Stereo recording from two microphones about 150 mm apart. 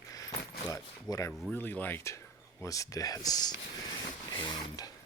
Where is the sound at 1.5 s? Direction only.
10° left (ahead or behind).